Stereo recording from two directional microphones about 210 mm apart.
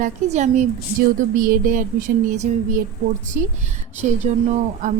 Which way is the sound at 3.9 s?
35° right (ahead or behind).